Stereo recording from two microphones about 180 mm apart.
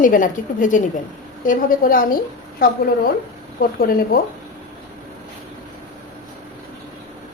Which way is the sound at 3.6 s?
55° left (ahead or behind).